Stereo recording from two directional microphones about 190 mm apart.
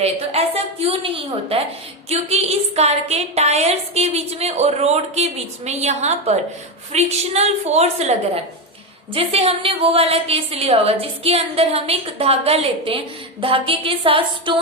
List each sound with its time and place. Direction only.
0.0 s a woman's voice: 30° right (ahead or behind)
9.1 s a woman's voice: 30° right (ahead or behind)